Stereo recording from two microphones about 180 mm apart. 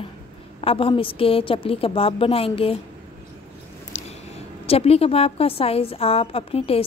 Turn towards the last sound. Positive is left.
turn(degrees=30)  # may be behind; listen again after turning